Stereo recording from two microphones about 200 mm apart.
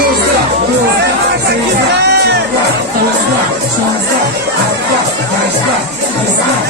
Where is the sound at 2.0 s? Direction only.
55° right (ahead or behind).